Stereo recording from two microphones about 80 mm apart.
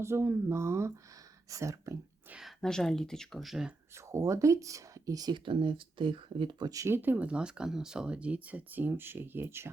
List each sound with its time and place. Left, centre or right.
0.0 s speech: right
2.4 s speech: centre
3.9 s speech: right
5.3 s speech: right
6.8 s speech: right